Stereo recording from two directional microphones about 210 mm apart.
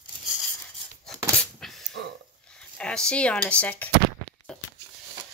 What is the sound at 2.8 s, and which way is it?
Speech, 5° left (ahead or behind).